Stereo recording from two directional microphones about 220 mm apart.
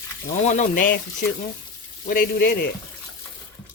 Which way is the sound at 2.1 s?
45° left (ahead or behind).